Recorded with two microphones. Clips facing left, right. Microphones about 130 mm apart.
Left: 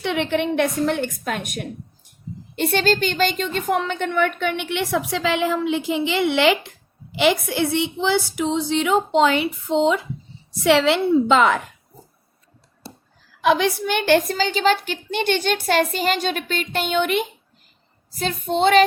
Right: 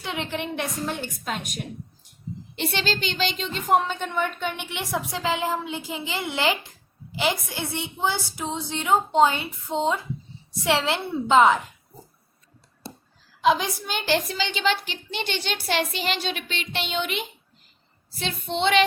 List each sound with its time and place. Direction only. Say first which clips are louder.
0.0 s a woman's voice: left 8 dB; 65° left (ahead or behind); by 10.0 s 90° left
10.6 s a woman's voice: left 7 dB; 75° left (ahead or behind)
13.4 s a woman's voice: left 3 dB; 65° left (ahead or behind)
18.1 s a woman's voice: left 6 dB; 40° left (ahead or behind)